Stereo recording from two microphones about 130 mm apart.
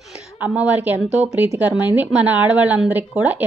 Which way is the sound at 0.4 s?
10° right (ahead or behind).